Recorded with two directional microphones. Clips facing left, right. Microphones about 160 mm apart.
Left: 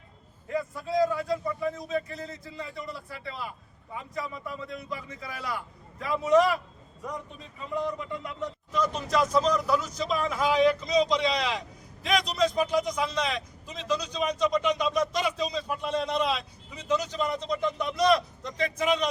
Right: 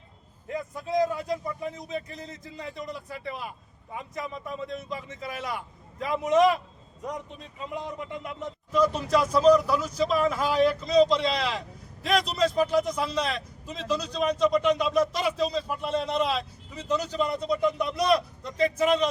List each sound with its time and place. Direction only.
0.5 s a man's voice: 20° right (ahead or behind)
8.7 s a man's voice: 5° right (ahead or behind)